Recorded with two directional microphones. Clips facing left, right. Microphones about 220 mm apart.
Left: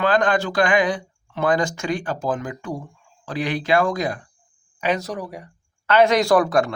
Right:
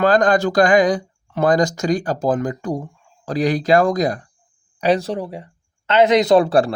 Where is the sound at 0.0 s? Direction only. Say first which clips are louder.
Right 4 dB; 40° right (ahead or behind).